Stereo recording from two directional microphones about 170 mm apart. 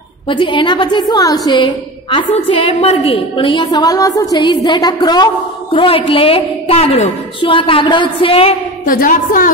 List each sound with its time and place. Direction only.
0.3 s a woman's voice: 30° left (ahead or behind)
8.8 s a woman's voice: 55° left (ahead or behind)